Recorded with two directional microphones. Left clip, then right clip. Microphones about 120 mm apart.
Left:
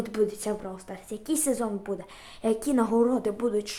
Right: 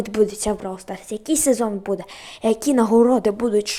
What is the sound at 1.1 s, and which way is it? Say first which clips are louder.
A woman's voice: right 9 dB; 35° right (ahead or behind).